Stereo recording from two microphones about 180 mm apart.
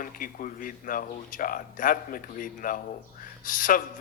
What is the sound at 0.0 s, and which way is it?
A man's voice, 50° left (ahead or behind).